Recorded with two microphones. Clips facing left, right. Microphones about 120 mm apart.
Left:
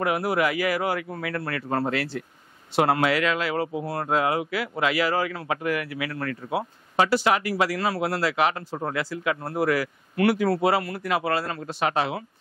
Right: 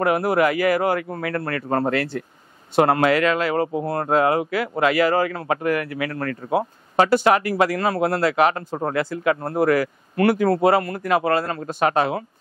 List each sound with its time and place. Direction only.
0.0 s speech: 50° right (ahead or behind)